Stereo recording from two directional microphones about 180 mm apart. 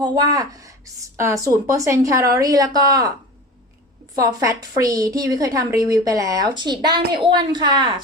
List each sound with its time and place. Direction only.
0.0 s a woman's voice: 20° right (ahead or behind)
4.1 s a woman's voice: 20° right (ahead or behind)